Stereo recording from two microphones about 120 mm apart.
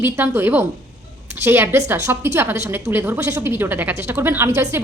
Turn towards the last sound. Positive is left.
turn(degrees=-25)  # may be behind; listen again after turning